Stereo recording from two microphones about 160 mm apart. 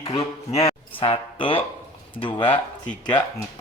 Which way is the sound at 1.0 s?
35° left (ahead or behind).